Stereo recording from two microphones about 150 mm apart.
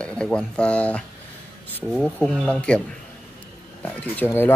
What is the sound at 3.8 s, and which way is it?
Speech, 10° left (ahead or behind).